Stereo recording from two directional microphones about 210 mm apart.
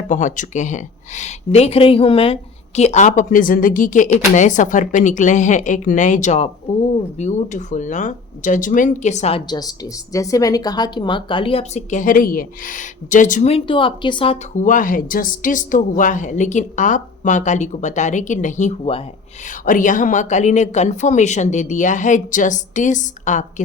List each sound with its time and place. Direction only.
0.1 s speech: 35° left (ahead or behind)
14.5 s speech: 40° left (ahead or behind)